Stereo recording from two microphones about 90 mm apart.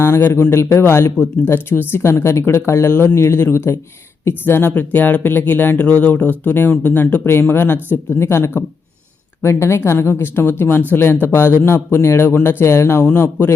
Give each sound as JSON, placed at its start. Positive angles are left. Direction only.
{"t": 0.0, "sound": "speech", "side_deg": 25}